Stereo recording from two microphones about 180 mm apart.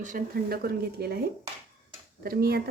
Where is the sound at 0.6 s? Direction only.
60° right (ahead or behind).